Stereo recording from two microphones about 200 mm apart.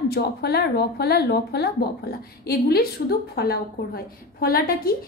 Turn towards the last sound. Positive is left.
turn(degrees=50)  # may be behind; listen again after turning